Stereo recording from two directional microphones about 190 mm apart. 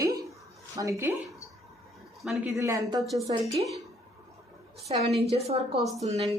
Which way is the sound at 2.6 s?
15° right (ahead or behind).